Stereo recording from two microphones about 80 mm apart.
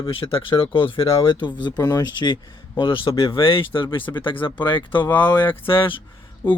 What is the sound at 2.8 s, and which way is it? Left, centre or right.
Speech, left.